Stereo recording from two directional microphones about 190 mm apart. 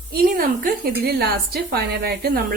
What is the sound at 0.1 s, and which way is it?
A woman's voice, 50° right (ahead or behind).